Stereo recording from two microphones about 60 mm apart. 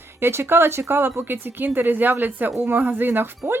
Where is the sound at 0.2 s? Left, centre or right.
Right.